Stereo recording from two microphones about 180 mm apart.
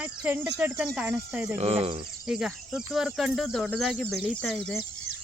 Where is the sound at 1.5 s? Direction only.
35° right (ahead or behind).